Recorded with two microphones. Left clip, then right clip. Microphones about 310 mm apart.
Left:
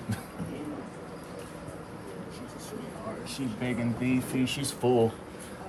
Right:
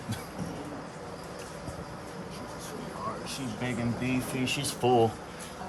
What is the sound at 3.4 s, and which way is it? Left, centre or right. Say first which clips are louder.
Speech: left 1 dB; centre.